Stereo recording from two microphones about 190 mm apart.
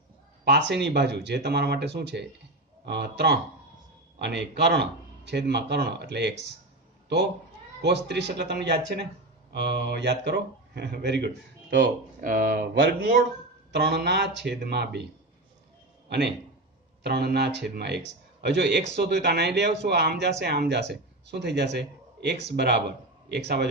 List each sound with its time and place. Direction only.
0.5 s a man's voice: 65° right (ahead or behind)
7.8 s a man's voice: 65° right (ahead or behind)
12.2 s speech: 45° right (ahead or behind)
13.7 s a man's voice: 60° right (ahead or behind)
16.1 s a man's voice: 60° right (ahead or behind)